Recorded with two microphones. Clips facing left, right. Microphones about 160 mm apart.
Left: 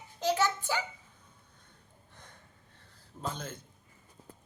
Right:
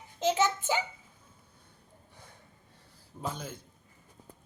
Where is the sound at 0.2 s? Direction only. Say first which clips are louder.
Right 2 dB; 20° right (ahead or behind).